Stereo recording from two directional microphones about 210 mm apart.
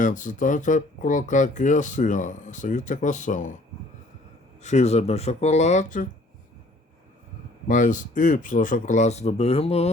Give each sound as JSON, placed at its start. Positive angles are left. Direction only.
{"t": 0.0, "sound": "speech", "side_deg": 35}
{"t": 4.6, "sound": "speech", "side_deg": 35}
{"t": 7.7, "sound": "speech", "side_deg": 35}